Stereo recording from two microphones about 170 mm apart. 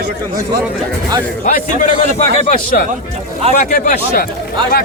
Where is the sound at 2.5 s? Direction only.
55° left (ahead or behind).